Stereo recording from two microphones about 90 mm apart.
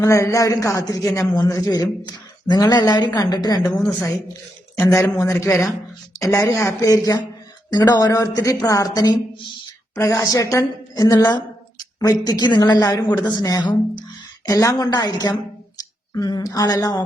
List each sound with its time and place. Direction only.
0.0 s a man's voice: 35° left (ahead or behind)
5.1 s a woman's voice: 35° left (ahead or behind)
7.7 s a man's voice: 50° left (ahead or behind)
10.0 s a woman's voice: 35° left (ahead or behind)